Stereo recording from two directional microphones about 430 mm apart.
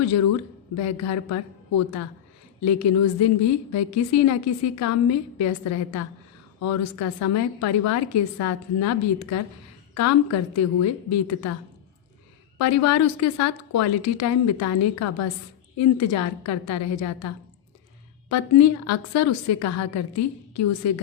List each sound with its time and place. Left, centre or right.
0.8 s a woman's voice: left
2.6 s a woman's voice: left
12.5 s a woman's voice: left
18.3 s a woman's voice: left